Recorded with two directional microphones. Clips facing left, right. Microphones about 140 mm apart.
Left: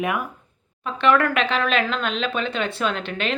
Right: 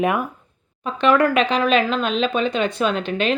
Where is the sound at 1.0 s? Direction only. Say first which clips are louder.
Right 3 dB; 15° right (ahead or behind).